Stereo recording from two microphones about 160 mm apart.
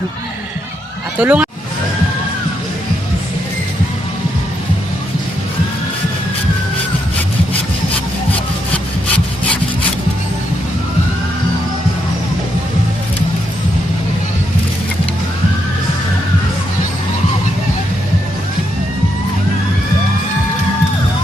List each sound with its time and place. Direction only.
1.2 s speech: 10° right (ahead or behind)